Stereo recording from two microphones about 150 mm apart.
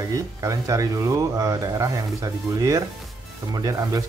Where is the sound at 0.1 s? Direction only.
20° right (ahead or behind).